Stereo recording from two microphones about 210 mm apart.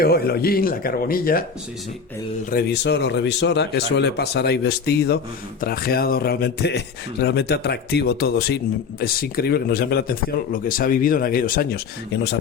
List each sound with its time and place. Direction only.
0.0 s speech: 50° left (ahead or behind)
2.5 s speech: 50° left (ahead or behind)